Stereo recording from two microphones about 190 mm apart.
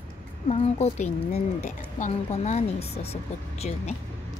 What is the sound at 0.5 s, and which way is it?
A woman's voice, 35° left (ahead or behind).